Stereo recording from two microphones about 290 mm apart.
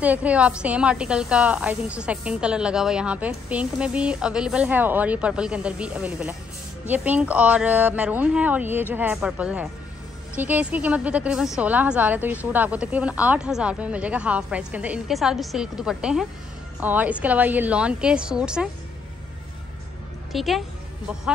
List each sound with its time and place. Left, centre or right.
0.0 s speech: centre
20.3 s speech: centre